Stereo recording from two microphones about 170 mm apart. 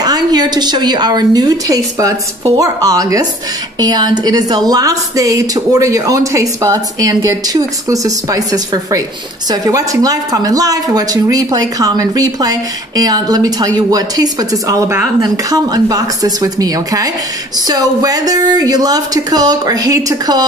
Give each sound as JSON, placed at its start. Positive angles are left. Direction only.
{"t": 0.0, "sound": "a woman's voice", "side_deg": -25}